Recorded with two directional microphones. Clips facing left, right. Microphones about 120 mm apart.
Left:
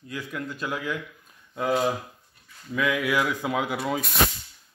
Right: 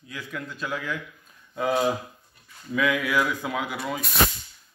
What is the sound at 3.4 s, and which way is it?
Speech, 25° left (ahead or behind).